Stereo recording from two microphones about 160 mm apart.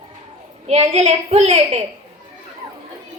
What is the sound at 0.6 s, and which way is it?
A woman's voice, 40° right (ahead or behind).